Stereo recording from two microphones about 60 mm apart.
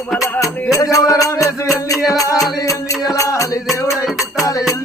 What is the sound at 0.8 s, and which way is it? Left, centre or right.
Music, left.